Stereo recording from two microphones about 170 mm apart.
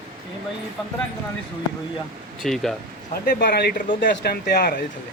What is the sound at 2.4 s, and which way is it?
Speech, centre (ahead or behind).